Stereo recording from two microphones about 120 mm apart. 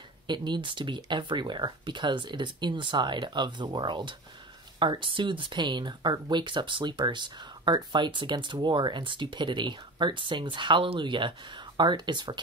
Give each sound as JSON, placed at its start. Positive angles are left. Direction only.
{"t": 0.3, "sound": "speech", "side_deg": -40}